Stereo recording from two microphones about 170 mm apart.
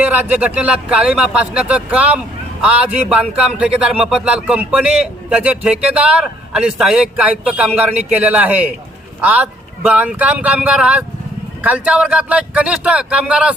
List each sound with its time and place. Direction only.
0.0 s music: 10° right (ahead or behind)